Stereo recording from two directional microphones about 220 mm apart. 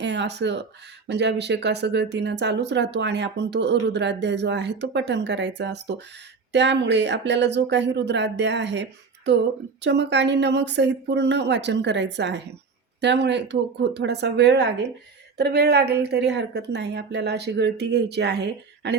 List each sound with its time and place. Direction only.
0.0 s speech: 50° right (ahead or behind)